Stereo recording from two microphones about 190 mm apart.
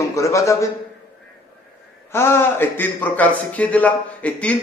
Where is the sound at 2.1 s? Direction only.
10° left (ahead or behind).